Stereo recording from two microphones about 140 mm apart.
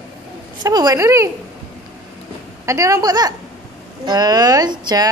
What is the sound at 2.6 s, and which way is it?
A woman's voice, 25° right (ahead or behind).